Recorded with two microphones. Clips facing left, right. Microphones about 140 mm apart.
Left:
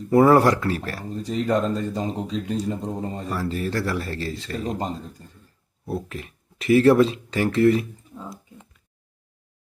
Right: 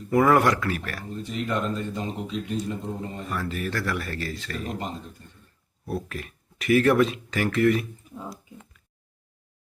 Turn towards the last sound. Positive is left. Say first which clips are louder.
# left 3 dB
turn(degrees=30)  # may be behind; listen again after turning